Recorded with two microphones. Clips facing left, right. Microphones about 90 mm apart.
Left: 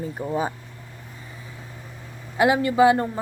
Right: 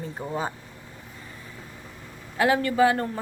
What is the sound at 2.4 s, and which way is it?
Speech, 15° left (ahead or behind).